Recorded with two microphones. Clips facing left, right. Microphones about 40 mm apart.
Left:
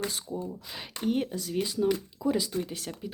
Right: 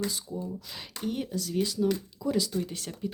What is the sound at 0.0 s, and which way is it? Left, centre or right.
Speech, left.